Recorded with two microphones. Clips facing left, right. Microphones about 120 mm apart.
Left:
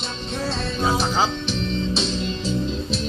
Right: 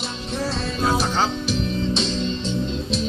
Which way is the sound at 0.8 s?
Centre (ahead or behind).